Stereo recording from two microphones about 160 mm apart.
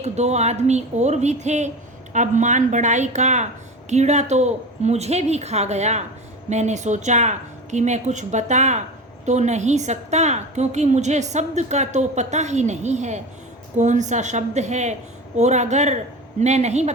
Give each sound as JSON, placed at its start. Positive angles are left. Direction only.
{"t": 0.0, "sound": "a woman's voice", "side_deg": -45}